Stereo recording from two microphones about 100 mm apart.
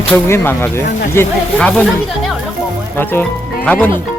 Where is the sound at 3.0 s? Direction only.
20° left (ahead or behind).